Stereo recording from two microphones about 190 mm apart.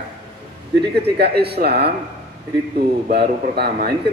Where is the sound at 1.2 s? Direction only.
55° right (ahead or behind).